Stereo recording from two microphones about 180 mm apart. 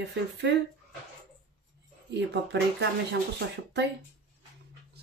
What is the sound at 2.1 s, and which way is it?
A woman's voice, 75° right (ahead or behind).